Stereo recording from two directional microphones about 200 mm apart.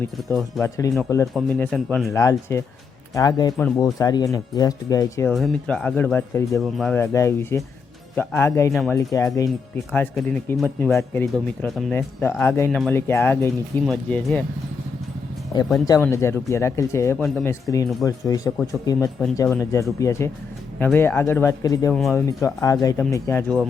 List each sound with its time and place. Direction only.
0.3 s speech: centre (ahead or behind)
0.6 s speech: 15° left (ahead or behind)
1.3 s speech: centre (ahead or behind); by 5.3 s 15° left (ahead or behind)
5.3 s speech: centre (ahead or behind)
6.6 s speech: centre (ahead or behind)
7.0 s speech: 15° left (ahead or behind)
8.7 s speech: centre (ahead or behind)
9.1 s speech: 15° left (ahead or behind); by 11.9 s centre (ahead or behind)
12.4 s speech: 10° left (ahead or behind)
15.9 s speech: 15° left (ahead or behind)